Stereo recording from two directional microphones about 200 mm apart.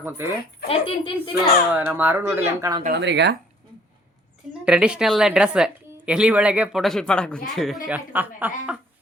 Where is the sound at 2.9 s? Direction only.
60° right (ahead or behind).